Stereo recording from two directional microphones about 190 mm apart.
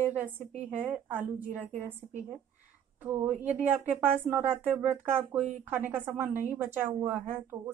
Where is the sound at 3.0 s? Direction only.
10° right (ahead or behind).